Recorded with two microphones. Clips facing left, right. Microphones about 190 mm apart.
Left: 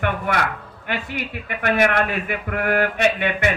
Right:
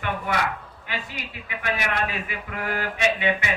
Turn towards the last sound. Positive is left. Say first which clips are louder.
# left 4 dB
turn(degrees=60)  # may be behind; listen again after turning